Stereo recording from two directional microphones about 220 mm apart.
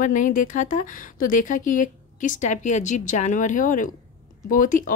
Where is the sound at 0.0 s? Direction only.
35° left (ahead or behind).